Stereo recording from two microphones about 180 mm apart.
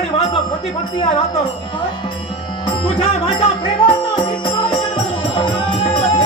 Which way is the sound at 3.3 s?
25° left (ahead or behind).